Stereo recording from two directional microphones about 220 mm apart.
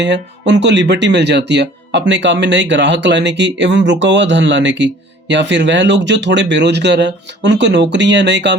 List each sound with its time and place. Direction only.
0.0 s speech: 55° right (ahead or behind)